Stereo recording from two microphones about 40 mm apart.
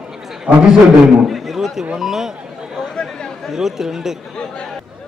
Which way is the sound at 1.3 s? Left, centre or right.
Centre.